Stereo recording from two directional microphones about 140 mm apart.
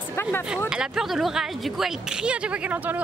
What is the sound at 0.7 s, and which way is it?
A woman's voice, 5° right (ahead or behind).